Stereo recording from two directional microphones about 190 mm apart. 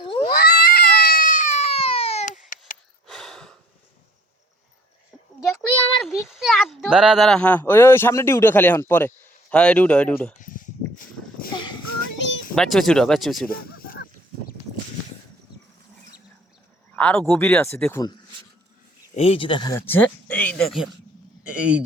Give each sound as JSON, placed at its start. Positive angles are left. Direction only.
{"t": 0.0, "sound": "cat", "side_deg": 25}
{"t": 0.3, "sound": "cat", "side_deg": 55}
{"t": 3.1, "sound": "gasp", "side_deg": 0}
{"t": 5.4, "sound": "a sound", "side_deg": -5}
{"t": 6.0, "sound": "speech", "side_deg": 0}
{"t": 10.4, "sound": "a sound", "side_deg": 45}
{"t": 12.1, "sound": "a sound", "side_deg": 70}
{"t": 12.5, "sound": "speech", "side_deg": 0}
{"t": 13.5, "sound": "a sound", "side_deg": 50}
{"t": 16.9, "sound": "speech", "side_deg": 5}
{"t": 19.1, "sound": "speech", "side_deg": 30}
{"t": 19.9, "sound": "speech", "side_deg": 10}